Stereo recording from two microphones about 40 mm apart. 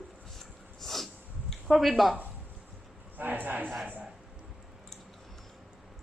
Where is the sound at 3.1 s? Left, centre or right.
Right.